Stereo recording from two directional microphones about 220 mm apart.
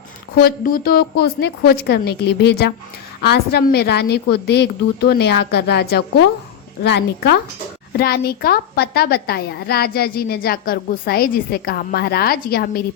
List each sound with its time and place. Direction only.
0.3 s a woman's voice: 40° left (ahead or behind)